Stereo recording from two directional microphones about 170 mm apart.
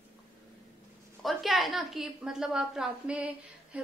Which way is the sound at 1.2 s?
Centre (ahead or behind).